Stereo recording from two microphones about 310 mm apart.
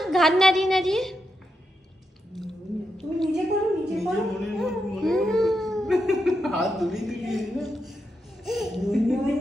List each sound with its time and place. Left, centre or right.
0.0 s a woman's voice: centre
3.0 s a sound: centre
8.5 s a woman's voice: centre